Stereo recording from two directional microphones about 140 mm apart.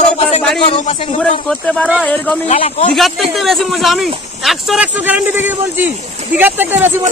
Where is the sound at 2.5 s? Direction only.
45° left (ahead or behind).